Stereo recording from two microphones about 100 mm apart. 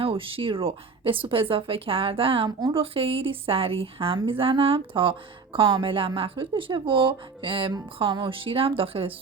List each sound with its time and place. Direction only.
0.0 s a woman's voice: 65° right (ahead or behind)